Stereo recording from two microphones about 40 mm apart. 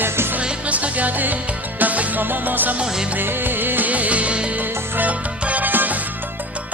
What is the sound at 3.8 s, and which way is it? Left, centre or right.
Music, right.